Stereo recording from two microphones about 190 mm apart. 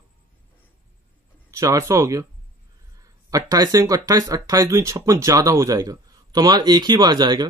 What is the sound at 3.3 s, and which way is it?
Speech, 20° right (ahead or behind).